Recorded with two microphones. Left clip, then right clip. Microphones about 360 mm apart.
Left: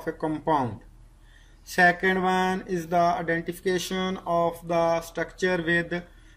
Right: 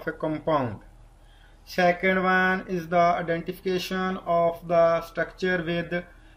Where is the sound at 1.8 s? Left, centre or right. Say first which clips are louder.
Left 1 dB; centre.